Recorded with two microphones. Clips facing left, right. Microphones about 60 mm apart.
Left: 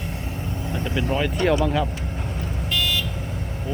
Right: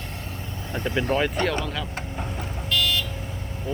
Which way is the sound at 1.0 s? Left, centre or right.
Centre.